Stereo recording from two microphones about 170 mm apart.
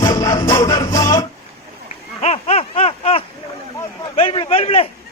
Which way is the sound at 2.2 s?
40° left (ahead or behind).